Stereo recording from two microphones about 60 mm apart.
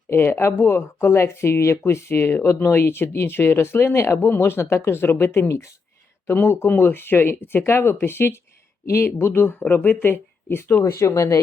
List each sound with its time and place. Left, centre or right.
0.1 s speech: left
4.2 s speech: left